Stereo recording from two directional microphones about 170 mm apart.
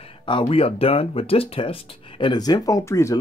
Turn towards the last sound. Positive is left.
turn(degrees=15)  # may be behind; listen again after turning